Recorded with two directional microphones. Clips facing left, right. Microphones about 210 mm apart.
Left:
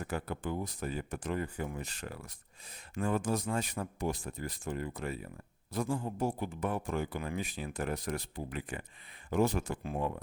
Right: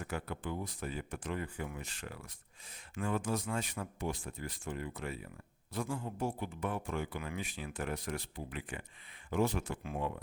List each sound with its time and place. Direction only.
0.0 s speech: 40° left (ahead or behind)